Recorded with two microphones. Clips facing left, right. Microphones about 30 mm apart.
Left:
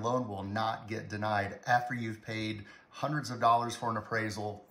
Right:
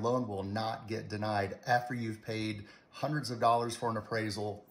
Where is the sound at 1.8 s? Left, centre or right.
Left.